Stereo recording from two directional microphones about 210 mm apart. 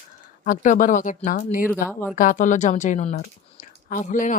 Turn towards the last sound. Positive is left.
turn(degrees=40)  # may be behind; listen again after turning